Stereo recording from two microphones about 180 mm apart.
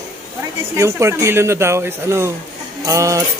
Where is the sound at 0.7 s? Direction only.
15° right (ahead or behind).